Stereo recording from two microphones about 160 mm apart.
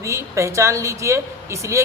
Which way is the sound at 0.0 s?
20° right (ahead or behind).